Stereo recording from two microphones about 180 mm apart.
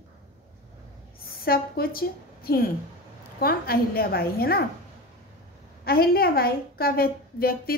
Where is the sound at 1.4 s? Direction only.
55° left (ahead or behind).